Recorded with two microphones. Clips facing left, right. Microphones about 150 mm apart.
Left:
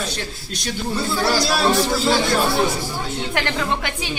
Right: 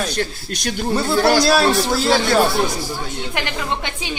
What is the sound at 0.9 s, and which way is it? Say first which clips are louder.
Speech: right 5 dB; 75° right (ahead or behind).